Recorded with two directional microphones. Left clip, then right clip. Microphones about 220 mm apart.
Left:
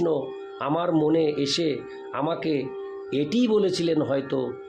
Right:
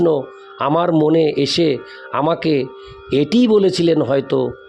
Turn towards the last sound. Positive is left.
turn(degrees=-45)  # may be behind; listen again after turning